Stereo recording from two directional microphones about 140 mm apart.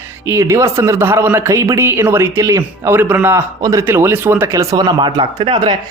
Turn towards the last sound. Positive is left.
turn(degrees=-35)  # may be behind; listen again after turning